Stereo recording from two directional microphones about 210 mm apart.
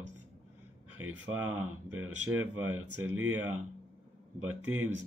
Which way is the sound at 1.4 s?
90° right.